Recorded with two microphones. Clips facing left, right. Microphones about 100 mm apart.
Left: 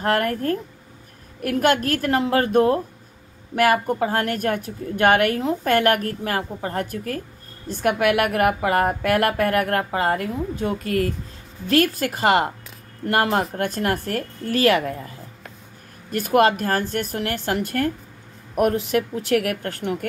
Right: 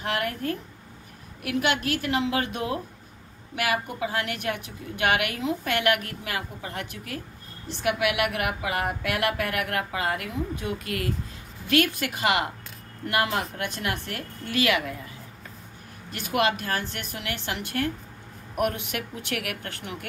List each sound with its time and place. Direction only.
0.0 s a woman's voice: 45° left (ahead or behind)